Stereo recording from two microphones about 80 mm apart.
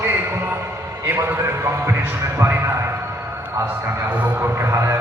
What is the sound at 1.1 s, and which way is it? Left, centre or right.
A man's voice, right.